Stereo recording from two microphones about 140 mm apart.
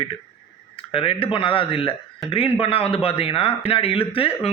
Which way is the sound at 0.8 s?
40° left (ahead or behind).